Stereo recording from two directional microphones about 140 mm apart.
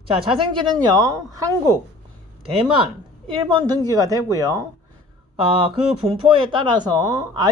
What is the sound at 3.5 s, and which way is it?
Speech, 30° right (ahead or behind).